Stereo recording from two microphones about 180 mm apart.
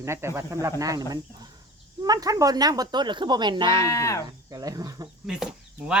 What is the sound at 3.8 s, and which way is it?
Speech, 15° left (ahead or behind).